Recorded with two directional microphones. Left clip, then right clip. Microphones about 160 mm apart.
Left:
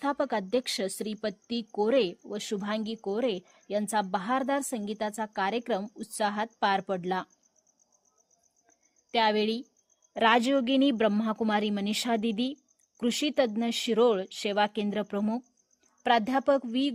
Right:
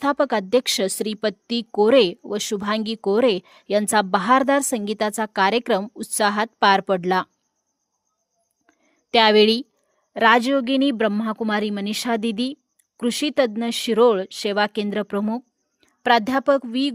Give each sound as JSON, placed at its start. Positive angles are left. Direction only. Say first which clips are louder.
{"t": 0.0, "sound": "a woman's voice", "louder": "right 9 dB", "side_deg": -35}
{"t": 9.0, "sound": "a woman's voice", "louder": "right 11 dB", "side_deg": -45}
{"t": 10.1, "sound": "speech", "louder": "right 7 dB", "side_deg": -25}